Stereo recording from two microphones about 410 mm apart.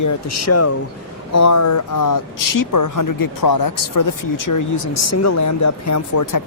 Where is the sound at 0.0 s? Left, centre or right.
Left.